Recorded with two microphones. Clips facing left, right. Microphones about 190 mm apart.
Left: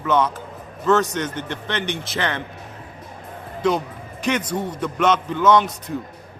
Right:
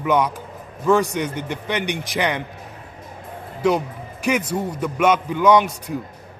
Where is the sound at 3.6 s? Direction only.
10° right (ahead or behind).